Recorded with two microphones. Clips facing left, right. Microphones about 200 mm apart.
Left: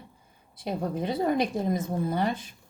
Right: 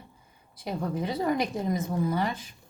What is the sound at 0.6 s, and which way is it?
Speech, 50° left (ahead or behind).